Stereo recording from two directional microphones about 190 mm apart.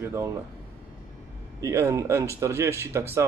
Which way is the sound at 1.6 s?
15° right (ahead or behind).